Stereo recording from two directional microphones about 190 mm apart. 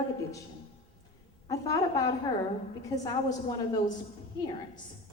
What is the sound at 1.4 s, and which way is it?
A woman's voice, 20° left (ahead or behind).